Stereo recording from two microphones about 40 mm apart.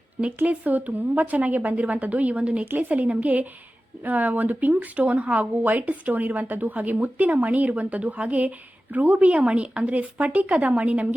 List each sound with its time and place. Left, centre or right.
0.4 s a woman's voice: right